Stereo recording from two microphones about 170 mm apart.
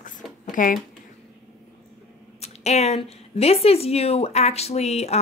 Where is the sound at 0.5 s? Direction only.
55° left (ahead or behind).